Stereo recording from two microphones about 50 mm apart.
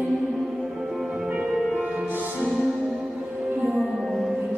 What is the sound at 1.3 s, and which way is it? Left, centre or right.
Music, centre.